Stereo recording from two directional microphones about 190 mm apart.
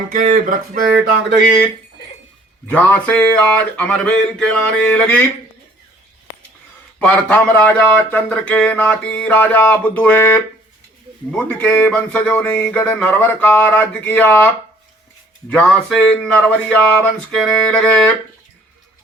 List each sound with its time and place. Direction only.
0.1 s music: 45° right (ahead or behind)
2.6 s speech: 10° left (ahead or behind)
7.0 s speech: 5° left (ahead or behind)